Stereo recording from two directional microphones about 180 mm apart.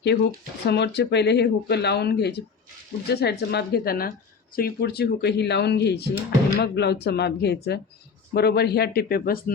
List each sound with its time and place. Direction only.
0.0 s speech: 65° left (ahead or behind)